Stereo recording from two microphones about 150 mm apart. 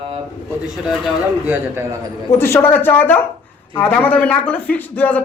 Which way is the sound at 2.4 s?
15° left (ahead or behind).